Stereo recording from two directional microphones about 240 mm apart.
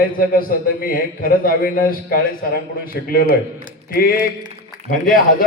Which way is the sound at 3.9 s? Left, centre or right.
Left.